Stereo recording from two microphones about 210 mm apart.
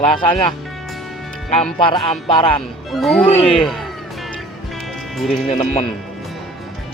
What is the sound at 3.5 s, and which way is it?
Music, centre (ahead or behind).